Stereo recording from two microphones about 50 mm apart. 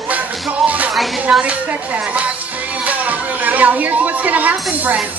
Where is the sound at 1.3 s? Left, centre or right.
Right.